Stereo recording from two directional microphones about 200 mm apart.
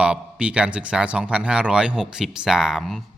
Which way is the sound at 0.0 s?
5° right (ahead or behind).